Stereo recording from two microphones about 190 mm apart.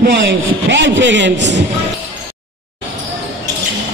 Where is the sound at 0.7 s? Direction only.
70° right (ahead or behind).